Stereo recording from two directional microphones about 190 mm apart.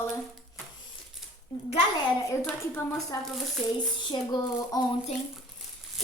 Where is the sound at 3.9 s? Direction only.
25° left (ahead or behind).